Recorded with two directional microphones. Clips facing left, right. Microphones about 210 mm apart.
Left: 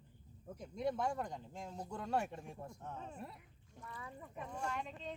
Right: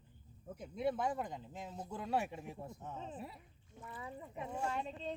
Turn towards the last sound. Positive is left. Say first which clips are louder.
# right 3 dB
turn(degrees=-35)  # may be behind; listen again after turning